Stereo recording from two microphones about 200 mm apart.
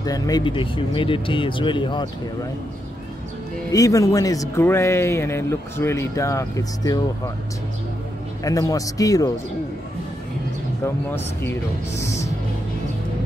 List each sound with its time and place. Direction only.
0.0 s speech: 20° left (ahead or behind)
3.7 s a man's voice: 15° left (ahead or behind)
8.5 s a man's voice: 15° left (ahead or behind)
11.1 s a man's voice: 10° left (ahead or behind)